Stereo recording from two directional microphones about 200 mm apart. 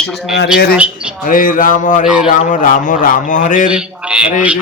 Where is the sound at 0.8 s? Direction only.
5° right (ahead or behind).